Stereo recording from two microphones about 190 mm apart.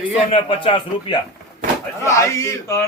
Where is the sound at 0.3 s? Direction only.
30° left (ahead or behind).